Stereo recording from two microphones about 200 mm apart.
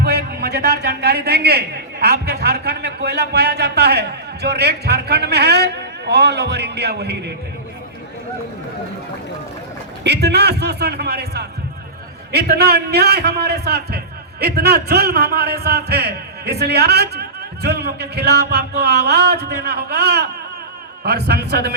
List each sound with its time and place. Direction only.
0.0 s a man's voice: 55° right (ahead or behind)
10.0 s a man's voice: 55° right (ahead or behind)